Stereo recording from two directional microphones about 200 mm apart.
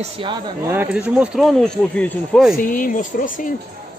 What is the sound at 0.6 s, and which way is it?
Speech, 10° right (ahead or behind).